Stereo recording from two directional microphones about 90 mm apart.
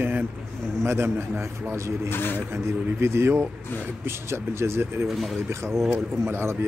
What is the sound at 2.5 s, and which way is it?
A man's voice, 30° right (ahead or behind).